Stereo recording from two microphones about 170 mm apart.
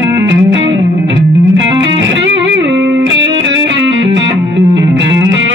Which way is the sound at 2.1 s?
90° right.